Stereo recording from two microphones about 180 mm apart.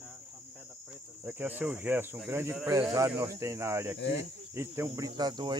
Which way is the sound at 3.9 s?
75° left (ahead or behind).